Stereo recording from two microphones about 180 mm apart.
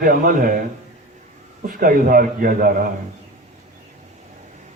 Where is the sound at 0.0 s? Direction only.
50° right (ahead or behind).